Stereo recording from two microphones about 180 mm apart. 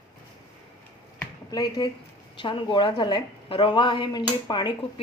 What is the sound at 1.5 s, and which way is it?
Speech, 20° left (ahead or behind).